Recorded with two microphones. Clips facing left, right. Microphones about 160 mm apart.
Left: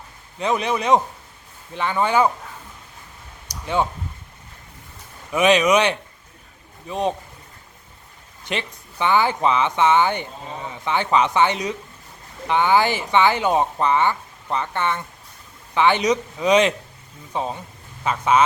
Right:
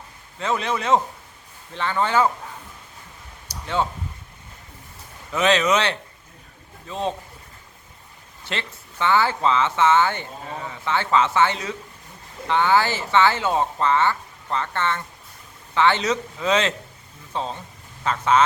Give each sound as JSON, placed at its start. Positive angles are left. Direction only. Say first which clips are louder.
{"t": 0.3, "sound": "speech", "louder": "left 3 dB", "side_deg": 15}
{"t": 3.5, "sound": "a sound", "louder": "left 2 dB", "side_deg": 15}
{"t": 5.3, "sound": "speech", "louder": "left 3 dB", "side_deg": 15}
{"t": 8.4, "sound": "speech", "louder": "left 3 dB", "side_deg": 15}